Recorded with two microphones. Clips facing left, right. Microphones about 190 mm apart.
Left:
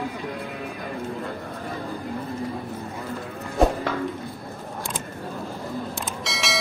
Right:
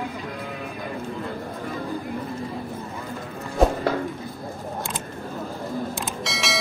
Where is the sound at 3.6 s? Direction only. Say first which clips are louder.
Even; centre (ahead or behind).